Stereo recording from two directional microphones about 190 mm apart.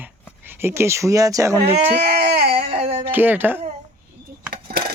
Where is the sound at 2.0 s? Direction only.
60° right (ahead or behind).